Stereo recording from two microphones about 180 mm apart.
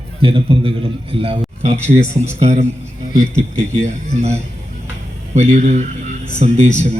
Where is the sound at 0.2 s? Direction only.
30° right (ahead or behind).